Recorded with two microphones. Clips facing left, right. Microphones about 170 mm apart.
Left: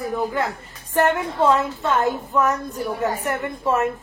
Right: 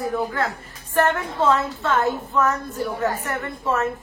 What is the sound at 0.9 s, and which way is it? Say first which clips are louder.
A woman's voice: left 1 dB; 15° left (ahead or behind).